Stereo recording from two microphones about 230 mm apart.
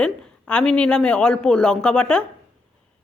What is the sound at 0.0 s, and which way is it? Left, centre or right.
Speech, centre.